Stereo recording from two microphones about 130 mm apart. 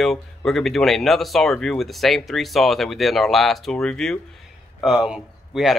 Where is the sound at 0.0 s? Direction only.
Centre (ahead or behind).